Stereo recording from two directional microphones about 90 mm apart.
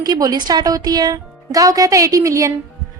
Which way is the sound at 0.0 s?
45° right (ahead or behind).